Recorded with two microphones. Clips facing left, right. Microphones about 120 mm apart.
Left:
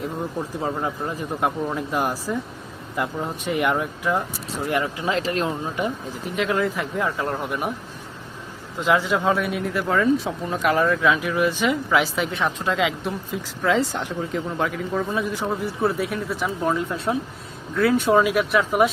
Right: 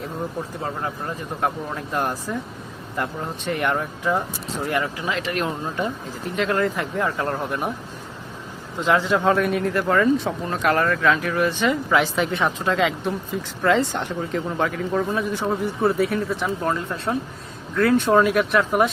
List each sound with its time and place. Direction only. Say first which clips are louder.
0.6 s speech: left 3 dB; 10° left (ahead or behind)
4.7 s speech: left 2 dB; 20° left (ahead or behind)
5.7 s speech: even; 10° left (ahead or behind)
8.8 s speech: right 1 dB; 5° left (ahead or behind)